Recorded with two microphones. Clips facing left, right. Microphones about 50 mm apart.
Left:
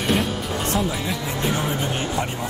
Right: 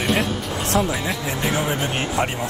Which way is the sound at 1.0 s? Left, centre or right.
Centre.